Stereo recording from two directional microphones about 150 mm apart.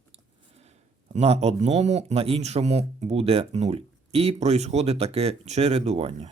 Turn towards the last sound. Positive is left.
turn(degrees=-45)  # may be behind; listen again after turning